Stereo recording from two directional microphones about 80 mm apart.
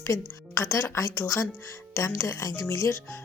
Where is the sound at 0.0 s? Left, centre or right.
Left.